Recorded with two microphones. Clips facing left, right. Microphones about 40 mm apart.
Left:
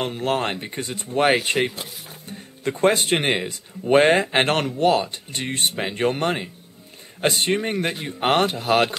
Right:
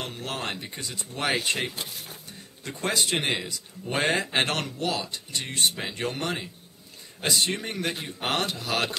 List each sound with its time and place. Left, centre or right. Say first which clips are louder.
0.0 s speech: left 9 dB; left
1.4 s speech: left 6 dB; left
2.2 s speech: left 11 dB; left